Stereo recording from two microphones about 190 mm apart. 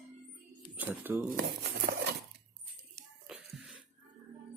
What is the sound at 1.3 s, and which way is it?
Speech, 55° right (ahead or behind).